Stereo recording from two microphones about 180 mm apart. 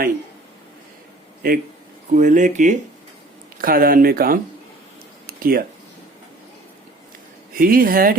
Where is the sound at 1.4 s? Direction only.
50° right (ahead or behind).